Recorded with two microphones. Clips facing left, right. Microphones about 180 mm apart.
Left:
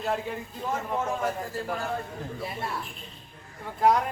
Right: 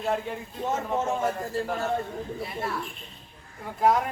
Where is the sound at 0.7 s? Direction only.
25° right (ahead or behind).